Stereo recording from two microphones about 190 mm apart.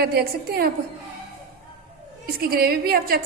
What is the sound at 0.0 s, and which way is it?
Speech, 55° right (ahead or behind).